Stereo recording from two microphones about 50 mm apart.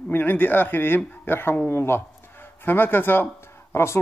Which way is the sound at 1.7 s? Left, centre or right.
Left.